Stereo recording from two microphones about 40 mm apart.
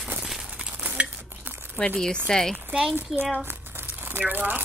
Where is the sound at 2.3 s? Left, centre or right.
Centre.